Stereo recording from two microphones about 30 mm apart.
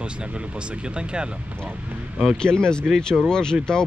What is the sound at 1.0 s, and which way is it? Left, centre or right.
Speech, right.